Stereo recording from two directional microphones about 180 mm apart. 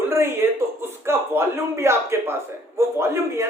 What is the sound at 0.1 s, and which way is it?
A man's voice, 15° right (ahead or behind).